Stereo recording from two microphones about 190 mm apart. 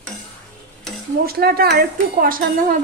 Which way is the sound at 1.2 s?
55° right (ahead or behind).